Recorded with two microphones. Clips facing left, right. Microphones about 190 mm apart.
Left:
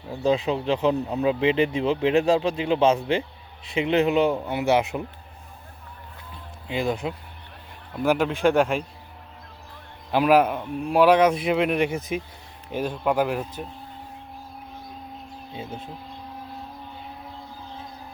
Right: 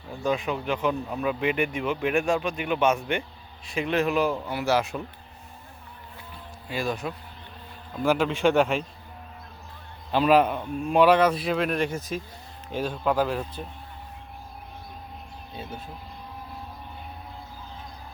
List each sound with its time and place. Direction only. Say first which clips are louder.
0.3 s speech: left 4 dB; 25° left (ahead or behind)
6.7 s speech: left 3 dB; 20° left (ahead or behind)
8.4 s a man's voice: left 1 dB; centre (ahead or behind)
10.1 s speech: left 1 dB; 10° left (ahead or behind)